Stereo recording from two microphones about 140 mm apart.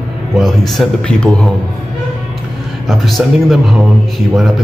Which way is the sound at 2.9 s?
Centre (ahead or behind).